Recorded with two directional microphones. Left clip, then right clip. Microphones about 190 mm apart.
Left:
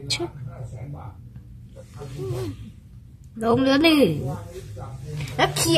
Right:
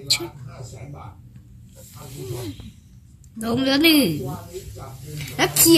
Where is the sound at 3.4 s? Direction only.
50° left (ahead or behind).